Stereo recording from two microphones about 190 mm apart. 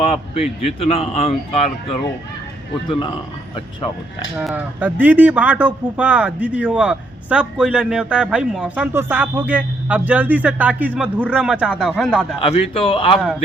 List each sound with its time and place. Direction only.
0.0 s speech: 30° left (ahead or behind)
4.4 s speech: 5° right (ahead or behind)
12.4 s a man's voice: 30° left (ahead or behind)